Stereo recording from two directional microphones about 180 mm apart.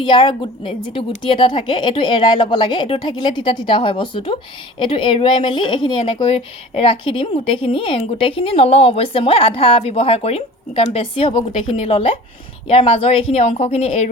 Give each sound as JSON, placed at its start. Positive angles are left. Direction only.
{"t": 0.0, "sound": "a woman's voice", "side_deg": 25}